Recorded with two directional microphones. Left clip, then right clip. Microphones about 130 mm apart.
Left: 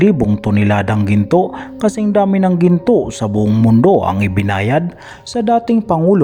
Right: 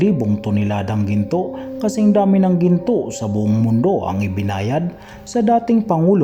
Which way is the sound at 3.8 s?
45° left (ahead or behind).